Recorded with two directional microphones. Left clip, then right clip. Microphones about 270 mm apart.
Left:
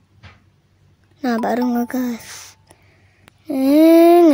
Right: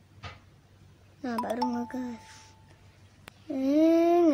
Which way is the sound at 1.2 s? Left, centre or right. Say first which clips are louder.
Left 11 dB; left.